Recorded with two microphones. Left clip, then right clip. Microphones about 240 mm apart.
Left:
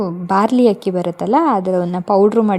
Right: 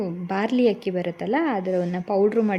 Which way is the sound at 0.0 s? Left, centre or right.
Left.